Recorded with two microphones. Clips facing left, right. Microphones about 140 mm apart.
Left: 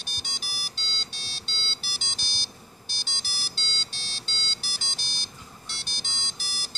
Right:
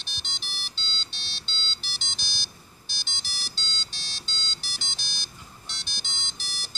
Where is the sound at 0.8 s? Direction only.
45° left (ahead or behind).